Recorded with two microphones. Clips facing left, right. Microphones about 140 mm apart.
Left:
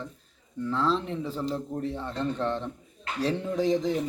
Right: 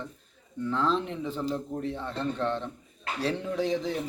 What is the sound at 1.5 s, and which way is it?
Speech, 10° left (ahead or behind).